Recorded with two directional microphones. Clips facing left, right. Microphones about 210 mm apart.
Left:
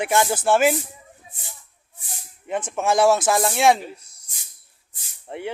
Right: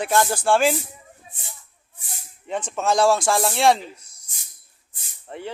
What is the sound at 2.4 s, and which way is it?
Speech, 10° left (ahead or behind).